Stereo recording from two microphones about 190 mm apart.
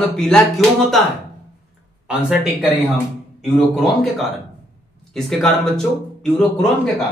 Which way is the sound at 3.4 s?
Centre (ahead or behind).